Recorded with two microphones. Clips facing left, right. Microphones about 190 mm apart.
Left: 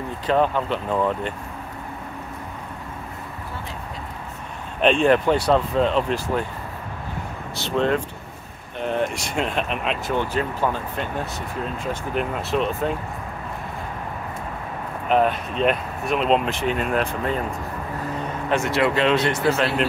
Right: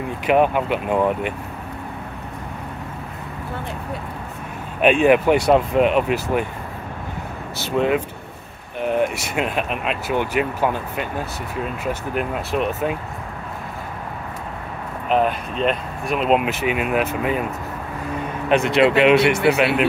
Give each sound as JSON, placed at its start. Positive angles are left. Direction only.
{"t": 0.3, "sound": "speech", "side_deg": -15}
{"t": 4.8, "sound": "speech", "side_deg": -10}
{"t": 7.7, "sound": "speech", "side_deg": -10}
{"t": 15.0, "sound": "speech", "side_deg": 0}
{"t": 18.5, "sound": "speech", "side_deg": -20}